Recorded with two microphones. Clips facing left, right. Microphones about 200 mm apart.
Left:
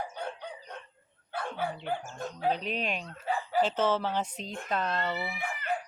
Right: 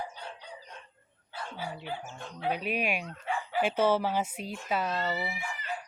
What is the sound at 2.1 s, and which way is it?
Speech, 40° left (ahead or behind).